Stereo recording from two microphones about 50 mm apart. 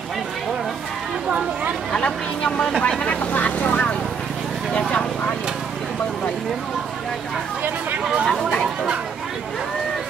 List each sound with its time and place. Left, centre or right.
2.0 s speech: centre
3.0 s vehicle: left
8.0 s speech: centre